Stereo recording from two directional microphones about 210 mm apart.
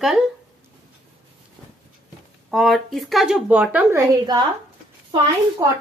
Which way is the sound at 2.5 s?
Centre (ahead or behind).